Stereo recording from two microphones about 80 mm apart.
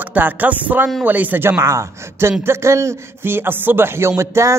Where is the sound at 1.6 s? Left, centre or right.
Right.